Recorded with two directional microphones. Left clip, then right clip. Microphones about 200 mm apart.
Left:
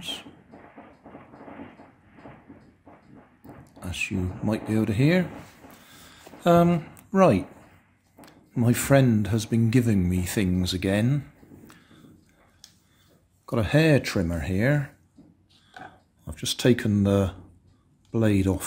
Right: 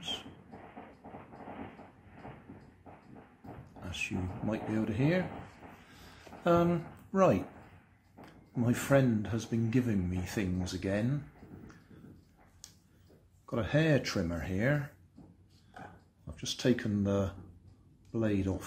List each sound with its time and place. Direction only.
3.8 s speech: 35° left (ahead or behind)
6.2 s speech: 35° left (ahead or behind)
13.5 s speech: 40° left (ahead or behind)
16.3 s speech: 40° left (ahead or behind)